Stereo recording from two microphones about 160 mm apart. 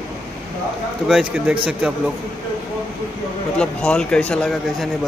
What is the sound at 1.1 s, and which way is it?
Speech, 5° right (ahead or behind).